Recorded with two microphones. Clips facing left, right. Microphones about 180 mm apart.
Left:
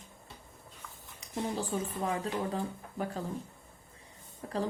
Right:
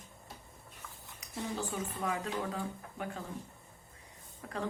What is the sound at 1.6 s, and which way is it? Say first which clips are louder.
A woman's voice: left 3 dB; 30° left (ahead or behind).